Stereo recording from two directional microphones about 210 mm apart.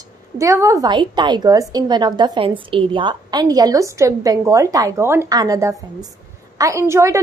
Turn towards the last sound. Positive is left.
turn(degrees=-15)  # may be behind; listen again after turning